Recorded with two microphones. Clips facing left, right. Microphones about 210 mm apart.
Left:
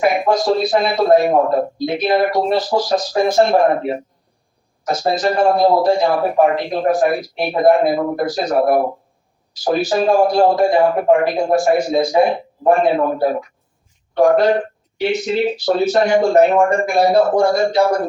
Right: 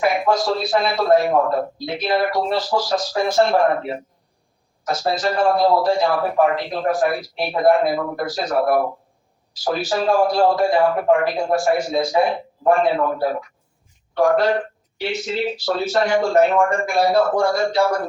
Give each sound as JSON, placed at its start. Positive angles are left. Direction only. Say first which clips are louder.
{"t": 0.0, "sound": "a man's voice", "louder": "left 3 dB", "side_deg": 20}